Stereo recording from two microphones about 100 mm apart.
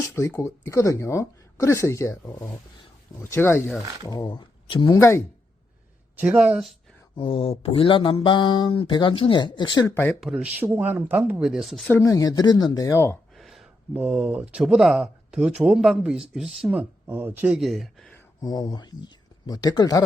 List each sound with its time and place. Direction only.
0.3 s speech: 30° left (ahead or behind)
4.0 s speech: 40° left (ahead or behind)
4.9 s speech: 30° left (ahead or behind)
6.1 s speech: 10° right (ahead or behind)
7.2 s speech: 65° left (ahead or behind)
9.9 s speech: 20° left (ahead or behind)
10.2 s speech: 5° right (ahead or behind)
11.4 s speech: centre (ahead or behind)
12.0 s speech: 35° left (ahead or behind)
13.3 s a sound: centre (ahead or behind)
13.9 s speech: 15° right (ahead or behind)
16.7 s speech: 20° right (ahead or behind)
17.6 s speech: centre (ahead or behind)
18.4 s speech: 40° left (ahead or behind)